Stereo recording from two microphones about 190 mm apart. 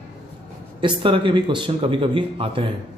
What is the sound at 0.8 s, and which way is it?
A man's voice, 25° right (ahead or behind).